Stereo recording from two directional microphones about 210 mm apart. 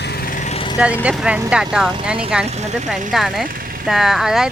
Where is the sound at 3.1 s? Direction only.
Centre (ahead or behind).